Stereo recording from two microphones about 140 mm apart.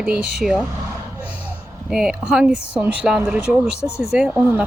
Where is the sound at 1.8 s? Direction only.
5° right (ahead or behind).